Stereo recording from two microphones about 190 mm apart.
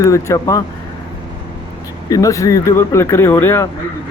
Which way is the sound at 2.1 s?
15° left (ahead or behind).